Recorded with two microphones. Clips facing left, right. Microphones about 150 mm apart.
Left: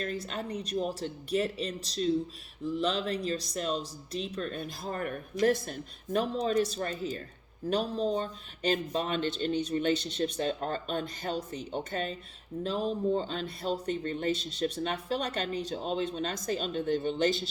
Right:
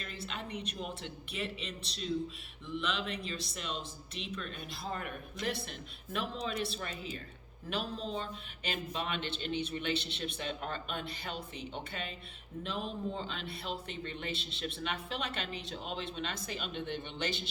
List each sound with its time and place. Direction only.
0.0 s speech: 40° left (ahead or behind)